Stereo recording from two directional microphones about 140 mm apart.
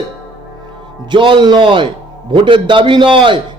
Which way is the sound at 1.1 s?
35° right (ahead or behind).